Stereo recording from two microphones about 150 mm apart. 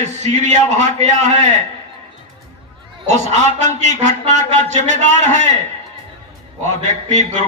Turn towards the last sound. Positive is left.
turn(degrees=-50)  # may be behind; listen again after turning